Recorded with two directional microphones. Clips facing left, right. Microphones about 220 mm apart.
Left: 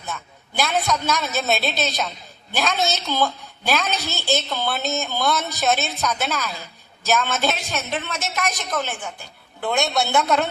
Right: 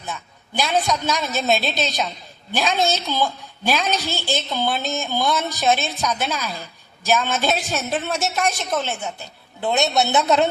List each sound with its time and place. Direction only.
0.0 s a woman's voice: 15° right (ahead or behind)
8.4 s a woman's voice: 30° right (ahead or behind)